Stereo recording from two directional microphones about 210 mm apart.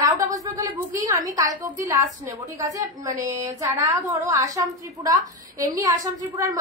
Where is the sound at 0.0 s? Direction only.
15° right (ahead or behind).